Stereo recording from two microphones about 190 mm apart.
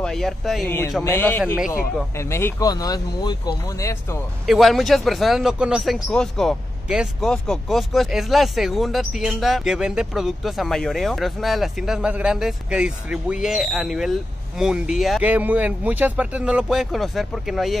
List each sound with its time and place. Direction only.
0.0 s a man's voice: centre (ahead or behind)
0.7 s speech: 10° left (ahead or behind)
4.5 s a man's voice: centre (ahead or behind)